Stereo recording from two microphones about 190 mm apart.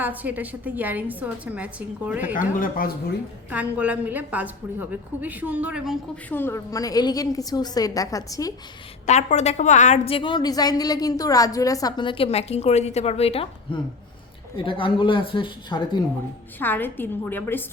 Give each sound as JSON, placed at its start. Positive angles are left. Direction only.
{"t": 0.0, "sound": "a woman's voice", "side_deg": -10}
{"t": 2.3, "sound": "speech", "side_deg": 45}
{"t": 3.5, "sound": "a woman's voice", "side_deg": -5}
{"t": 6.2, "sound": "a woman's voice", "side_deg": 10}
{"t": 9.0, "sound": "a woman's voice", "side_deg": 35}
{"t": 14.6, "sound": "a woman's voice", "side_deg": 25}
{"t": 16.6, "sound": "a woman's voice", "side_deg": 10}